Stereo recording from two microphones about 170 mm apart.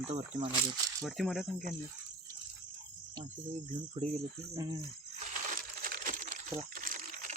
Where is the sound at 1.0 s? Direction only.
Centre (ahead or behind).